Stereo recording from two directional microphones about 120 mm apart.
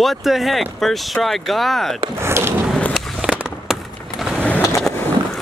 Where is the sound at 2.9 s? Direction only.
5° right (ahead or behind).